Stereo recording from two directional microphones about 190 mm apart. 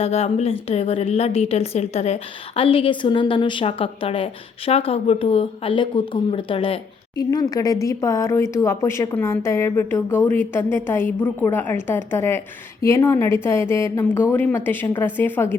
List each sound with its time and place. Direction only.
0.0 s a woman's voice: 35° left (ahead or behind); by 15.5 s 10° left (ahead or behind)